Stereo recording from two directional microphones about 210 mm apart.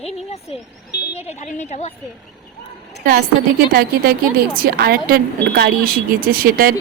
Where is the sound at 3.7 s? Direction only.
45° right (ahead or behind).